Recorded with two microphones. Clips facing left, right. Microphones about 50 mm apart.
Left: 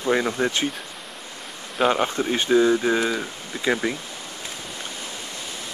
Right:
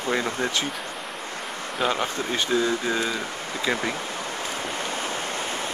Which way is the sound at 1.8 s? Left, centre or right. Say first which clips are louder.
Left 5 dB; centre.